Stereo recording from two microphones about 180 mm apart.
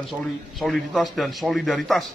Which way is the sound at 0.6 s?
Centre (ahead or behind).